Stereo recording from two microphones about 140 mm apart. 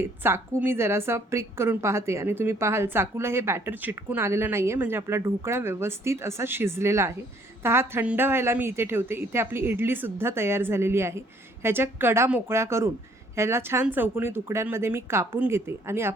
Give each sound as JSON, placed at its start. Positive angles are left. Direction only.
{"t": 0.2, "sound": "a woman's voice", "side_deg": -15}